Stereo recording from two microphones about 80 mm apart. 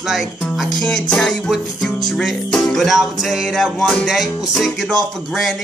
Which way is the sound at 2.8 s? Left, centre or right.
Centre.